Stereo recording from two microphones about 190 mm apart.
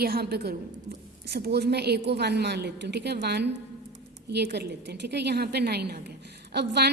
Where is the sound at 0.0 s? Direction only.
55° right (ahead or behind).